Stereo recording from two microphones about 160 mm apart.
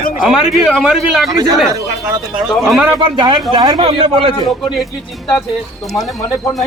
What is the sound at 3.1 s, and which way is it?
Speech, 30° right (ahead or behind).